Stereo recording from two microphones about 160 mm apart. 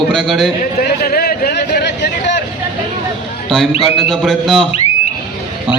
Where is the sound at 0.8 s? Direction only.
70° left (ahead or behind); by 2.4 s 90° left.